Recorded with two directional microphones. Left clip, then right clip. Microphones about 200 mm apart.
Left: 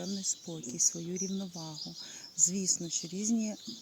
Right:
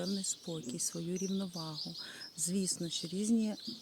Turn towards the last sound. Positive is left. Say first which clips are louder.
# even
turn(degrees=-15)  # may be behind; listen again after turning